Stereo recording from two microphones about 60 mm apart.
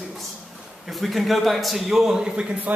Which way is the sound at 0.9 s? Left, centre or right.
Centre.